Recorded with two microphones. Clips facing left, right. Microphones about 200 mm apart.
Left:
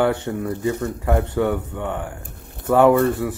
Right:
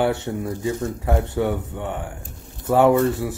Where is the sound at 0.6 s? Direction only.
60° left (ahead or behind).